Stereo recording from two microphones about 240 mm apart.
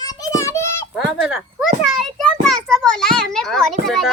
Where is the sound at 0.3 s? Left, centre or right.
Centre.